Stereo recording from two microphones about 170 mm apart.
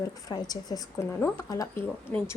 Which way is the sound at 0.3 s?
25° left (ahead or behind).